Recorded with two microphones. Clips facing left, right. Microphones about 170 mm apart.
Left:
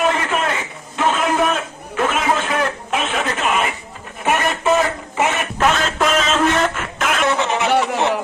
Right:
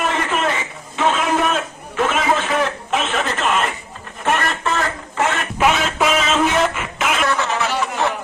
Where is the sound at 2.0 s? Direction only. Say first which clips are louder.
Even; centre (ahead or behind).